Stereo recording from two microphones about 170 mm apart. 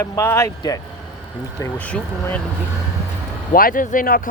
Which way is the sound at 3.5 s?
55° left (ahead or behind).